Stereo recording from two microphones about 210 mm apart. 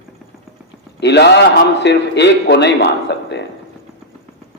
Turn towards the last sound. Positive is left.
turn(degrees=55)  # may be behind; listen again after turning